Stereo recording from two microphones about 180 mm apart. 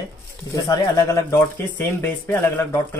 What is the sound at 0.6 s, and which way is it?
Speech, 20° left (ahead or behind).